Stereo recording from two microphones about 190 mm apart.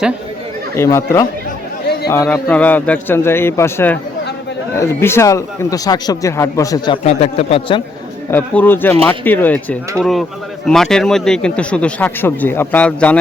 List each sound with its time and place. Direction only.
0.8 s speech: 15° left (ahead or behind)
7.0 s a man's voice: 35° left (ahead or behind)
8.3 s speech: 10° left (ahead or behind)